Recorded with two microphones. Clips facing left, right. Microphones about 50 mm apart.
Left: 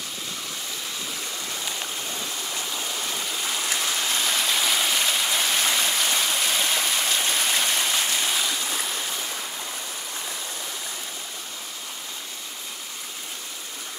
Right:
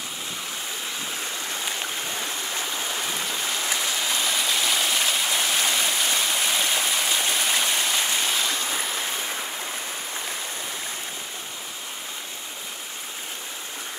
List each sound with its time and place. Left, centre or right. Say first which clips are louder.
1.5 s stream: right 2 dB; right
9.0 s stream: right 2 dB; right